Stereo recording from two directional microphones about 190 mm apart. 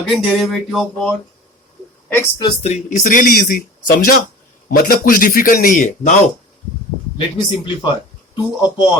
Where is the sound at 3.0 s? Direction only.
45° left (ahead or behind).